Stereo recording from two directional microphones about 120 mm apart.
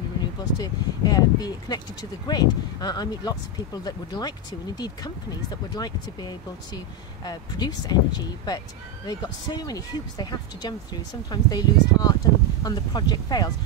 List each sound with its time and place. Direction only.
0.6 s speech: 30° left (ahead or behind)